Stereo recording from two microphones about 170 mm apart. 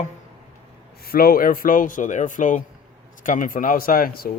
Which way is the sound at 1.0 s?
60° left (ahead or behind).